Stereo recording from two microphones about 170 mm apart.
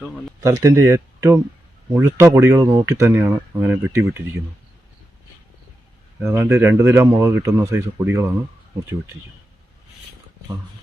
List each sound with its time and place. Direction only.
0.4 s speech: 15° right (ahead or behind)
6.2 s speech: 15° right (ahead or behind)